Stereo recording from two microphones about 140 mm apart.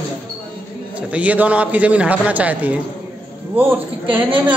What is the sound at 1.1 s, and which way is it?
A man's voice, 10° right (ahead or behind).